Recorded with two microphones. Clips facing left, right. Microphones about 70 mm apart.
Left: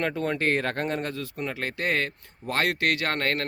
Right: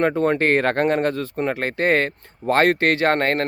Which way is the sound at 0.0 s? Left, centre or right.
Right.